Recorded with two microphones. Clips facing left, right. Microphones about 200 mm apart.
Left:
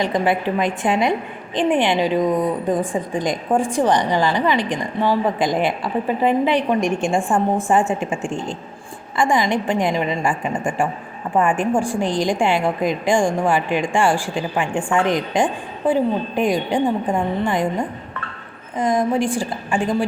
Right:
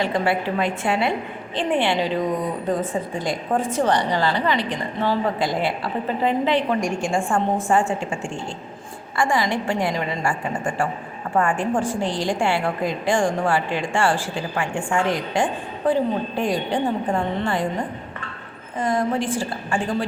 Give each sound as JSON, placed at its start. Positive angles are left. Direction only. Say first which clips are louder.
{"t": 0.0, "sound": "a woman's voice", "louder": "left 2 dB", "side_deg": 15}